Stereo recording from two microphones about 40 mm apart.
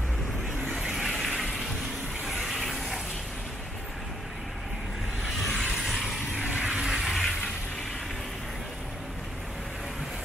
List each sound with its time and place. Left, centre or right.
0.9 s a sound: centre
1.4 s vehicle: centre
2.4 s bathtub: centre
5.7 s a sound: centre
6.4 s vehicle: right
6.8 s vehicle: centre